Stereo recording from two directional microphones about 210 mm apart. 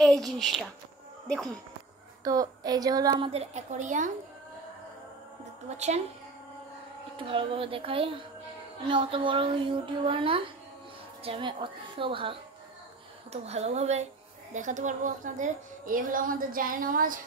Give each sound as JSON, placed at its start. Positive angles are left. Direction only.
{"t": 0.0, "sound": "a woman's voice", "side_deg": 0}
{"t": 2.2, "sound": "a woman's voice", "side_deg": -20}
{"t": 3.3, "sound": "a woman's voice", "side_deg": -30}
{"t": 5.7, "sound": "a woman's voice", "side_deg": -30}
{"t": 7.2, "sound": "a woman's voice", "side_deg": -25}